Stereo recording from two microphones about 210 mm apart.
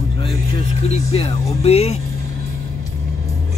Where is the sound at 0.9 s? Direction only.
30° left (ahead or behind).